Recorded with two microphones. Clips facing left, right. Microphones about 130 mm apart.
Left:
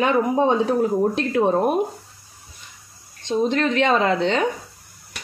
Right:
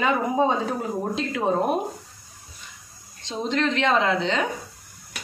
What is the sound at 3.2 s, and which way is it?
A woman's voice, 50° left (ahead or behind).